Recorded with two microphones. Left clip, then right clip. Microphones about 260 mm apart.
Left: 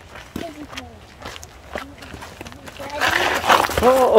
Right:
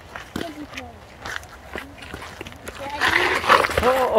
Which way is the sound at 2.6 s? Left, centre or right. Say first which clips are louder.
Left 1 dB; left.